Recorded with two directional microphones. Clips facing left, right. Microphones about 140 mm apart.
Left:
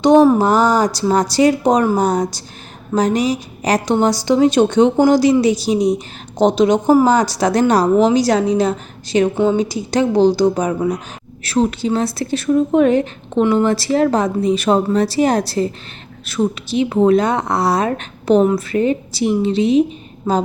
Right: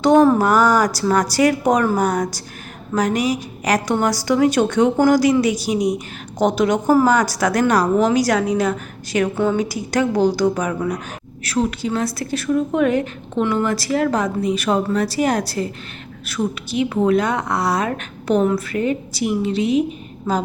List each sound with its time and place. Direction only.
0.0 s a woman's voice: 20° left (ahead or behind)